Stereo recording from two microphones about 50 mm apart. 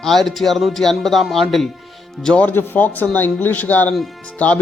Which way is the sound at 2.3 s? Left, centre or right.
Left.